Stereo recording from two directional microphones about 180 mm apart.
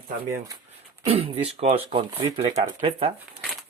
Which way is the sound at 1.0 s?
35° right (ahead or behind).